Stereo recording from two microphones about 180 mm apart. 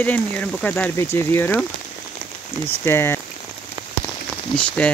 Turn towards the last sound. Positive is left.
turn(degrees=5)  # may be behind; listen again after turning